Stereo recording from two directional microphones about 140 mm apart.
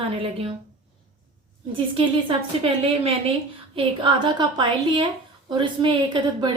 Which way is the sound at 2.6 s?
40° right (ahead or behind).